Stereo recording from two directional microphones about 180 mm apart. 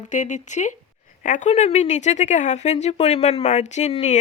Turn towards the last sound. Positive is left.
turn(degrees=40)  # may be behind; listen again after turning